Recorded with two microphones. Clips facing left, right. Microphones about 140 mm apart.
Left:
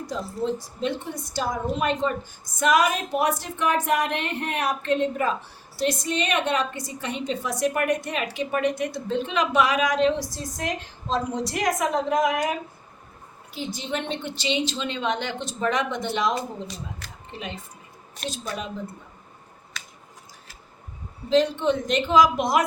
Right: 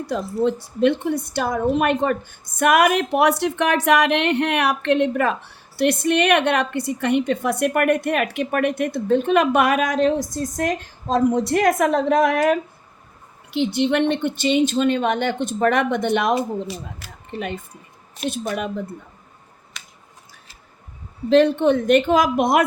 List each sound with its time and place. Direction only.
0.1 s a woman's voice: 65° right (ahead or behind)
17.3 s a woman's voice: 60° right (ahead or behind)
21.2 s a woman's voice: 60° right (ahead or behind)